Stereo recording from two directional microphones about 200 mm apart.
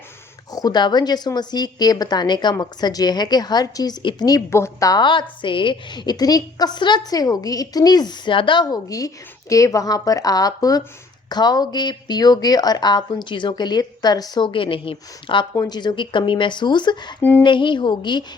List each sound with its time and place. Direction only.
0.5 s speech: 20° left (ahead or behind)
17.2 s a sound: 10° left (ahead or behind)
17.4 s speech: 25° left (ahead or behind)